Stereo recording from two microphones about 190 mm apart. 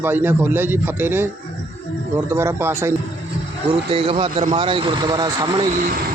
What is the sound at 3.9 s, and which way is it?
Speech, 30° right (ahead or behind).